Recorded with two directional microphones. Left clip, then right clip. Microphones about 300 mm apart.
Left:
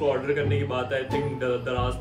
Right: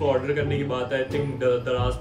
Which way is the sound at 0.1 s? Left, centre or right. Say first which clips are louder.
Right 1 dB; centre.